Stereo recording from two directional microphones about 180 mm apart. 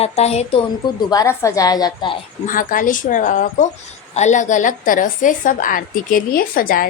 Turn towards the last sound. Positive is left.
turn(degrees=50)  # may be behind; listen again after turning